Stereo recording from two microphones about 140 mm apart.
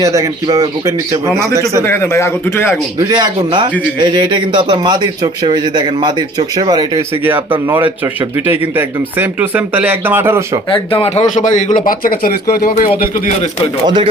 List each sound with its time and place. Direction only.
0.0 s speech: 25° right (ahead or behind)
1.8 s a man's voice: 15° left (ahead or behind)
3.0 s a man's voice: 30° right (ahead or behind)
8.0 s speech: 20° right (ahead or behind)
10.7 s speech: 40° left (ahead or behind); by 11.7 s 65° left (ahead or behind)
11.9 s speech: 90° left
12.9 s speech: 55° left (ahead or behind)
13.8 s a man's voice: 35° right (ahead or behind)